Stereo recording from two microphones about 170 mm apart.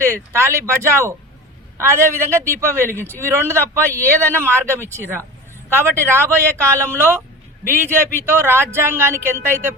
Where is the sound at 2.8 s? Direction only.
10° left (ahead or behind).